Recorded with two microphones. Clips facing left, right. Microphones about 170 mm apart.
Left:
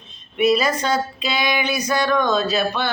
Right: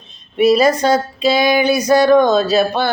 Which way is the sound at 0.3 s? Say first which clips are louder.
Right 6 dB; 35° right (ahead or behind).